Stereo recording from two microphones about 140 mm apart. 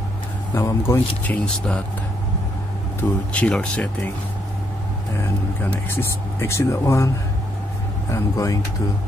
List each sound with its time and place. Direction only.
0.6 s speech: 20° left (ahead or behind)
3.0 s speech: 10° left (ahead or behind)
5.1 s speech: 15° left (ahead or behind)
8.1 s speech: 25° left (ahead or behind)